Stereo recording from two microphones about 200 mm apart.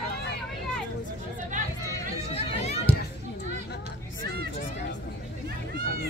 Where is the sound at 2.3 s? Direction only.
35° left (ahead or behind).